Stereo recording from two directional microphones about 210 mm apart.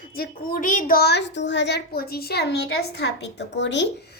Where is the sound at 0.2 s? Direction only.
40° left (ahead or behind).